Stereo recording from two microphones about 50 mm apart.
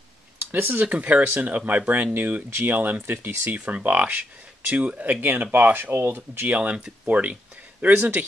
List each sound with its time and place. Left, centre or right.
0.5 s speech: right